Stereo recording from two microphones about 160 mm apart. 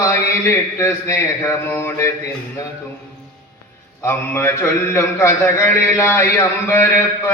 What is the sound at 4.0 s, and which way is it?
A man's voice, 15° left (ahead or behind).